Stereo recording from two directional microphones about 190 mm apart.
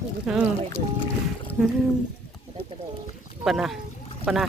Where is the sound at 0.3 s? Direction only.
Centre (ahead or behind).